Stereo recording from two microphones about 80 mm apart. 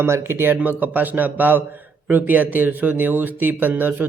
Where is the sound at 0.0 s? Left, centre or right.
Right.